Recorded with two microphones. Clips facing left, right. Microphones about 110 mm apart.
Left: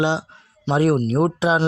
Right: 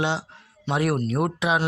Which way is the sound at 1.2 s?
35° left (ahead or behind).